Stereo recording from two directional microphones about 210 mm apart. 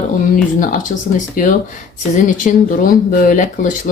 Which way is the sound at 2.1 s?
40° left (ahead or behind).